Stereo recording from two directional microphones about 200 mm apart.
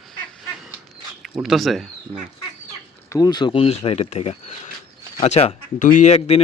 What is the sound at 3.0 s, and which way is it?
Speech, 20° left (ahead or behind).